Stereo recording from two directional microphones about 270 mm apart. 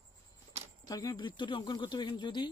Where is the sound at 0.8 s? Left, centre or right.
Centre.